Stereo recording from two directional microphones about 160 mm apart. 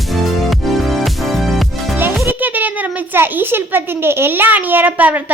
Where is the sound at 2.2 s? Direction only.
10° right (ahead or behind).